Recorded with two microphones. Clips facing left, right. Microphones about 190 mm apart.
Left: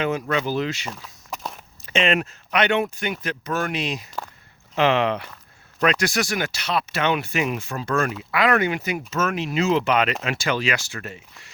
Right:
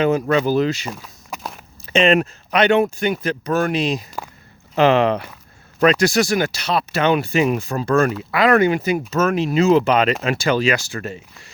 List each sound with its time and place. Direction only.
0.0 s speech: 35° right (ahead or behind)
0.9 s walk: 10° right (ahead or behind)
1.9 s speech: 35° right (ahead or behind)